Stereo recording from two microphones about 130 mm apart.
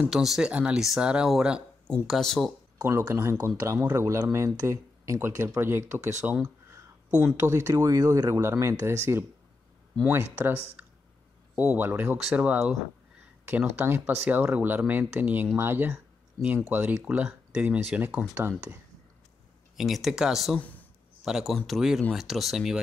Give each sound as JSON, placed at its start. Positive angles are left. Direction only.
{"t": 0.1, "sound": "speech", "side_deg": 0}
{"t": 2.8, "sound": "speech", "side_deg": -20}
{"t": 7.3, "sound": "speech", "side_deg": -25}
{"t": 12.2, "sound": "speech", "side_deg": -5}
{"t": 13.5, "sound": "speech", "side_deg": -15}
{"t": 19.8, "sound": "speech", "side_deg": 0}